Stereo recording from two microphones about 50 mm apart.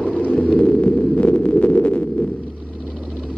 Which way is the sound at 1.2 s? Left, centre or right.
Left.